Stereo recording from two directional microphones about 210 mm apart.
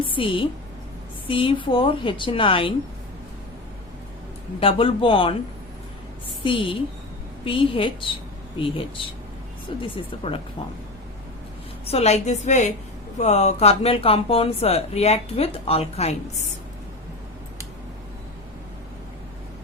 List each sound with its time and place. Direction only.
0.0 s speech: 25° left (ahead or behind)
4.6 s speech: 25° left (ahead or behind)
6.4 s speech: 25° left (ahead or behind)
11.9 s a woman's voice: 30° left (ahead or behind)